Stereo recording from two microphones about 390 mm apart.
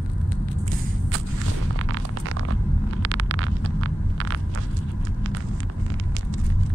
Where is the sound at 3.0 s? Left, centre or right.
Right.